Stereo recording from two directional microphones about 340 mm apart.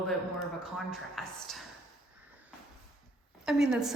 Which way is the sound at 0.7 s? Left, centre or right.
Centre.